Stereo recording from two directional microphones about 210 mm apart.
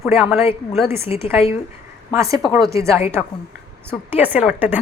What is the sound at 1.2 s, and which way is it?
A woman's voice, 10° right (ahead or behind).